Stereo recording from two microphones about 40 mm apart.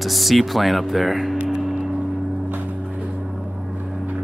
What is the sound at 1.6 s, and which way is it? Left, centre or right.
Gong, centre.